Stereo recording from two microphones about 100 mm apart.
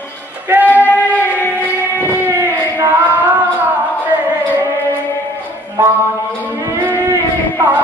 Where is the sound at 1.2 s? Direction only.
20° left (ahead or behind).